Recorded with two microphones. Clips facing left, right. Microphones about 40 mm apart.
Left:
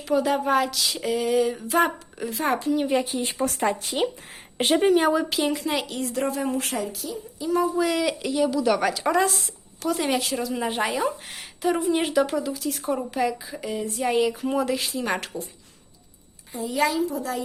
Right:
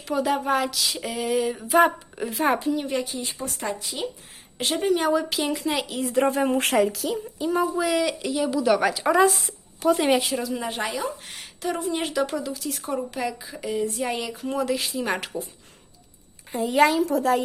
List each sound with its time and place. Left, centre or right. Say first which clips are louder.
0.0 s speech: left 2 dB; centre
2.7 s speech: left 4 dB; centre
3.2 s speech: left 6 dB; left
4.5 s speech: left 5 dB; left
4.9 s speech: left 2 dB; centre
6.3 s speech: right 4 dB; right
6.7 s speech: right 8 dB; right
7.4 s speech: even; right
7.8 s speech: even; centre
16.5 s a woman's voice: right 5 dB; right
16.9 s a woman's voice: right 4 dB; right